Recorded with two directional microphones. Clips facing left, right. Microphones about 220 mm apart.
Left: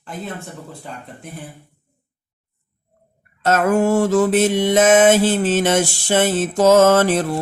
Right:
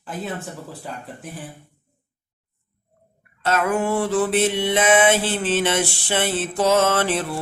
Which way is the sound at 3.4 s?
45° left (ahead or behind).